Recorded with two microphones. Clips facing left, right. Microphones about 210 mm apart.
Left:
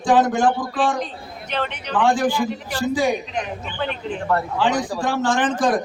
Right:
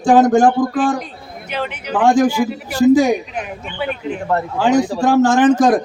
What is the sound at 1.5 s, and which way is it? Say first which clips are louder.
Speech: right 2 dB; 10° right (ahead or behind).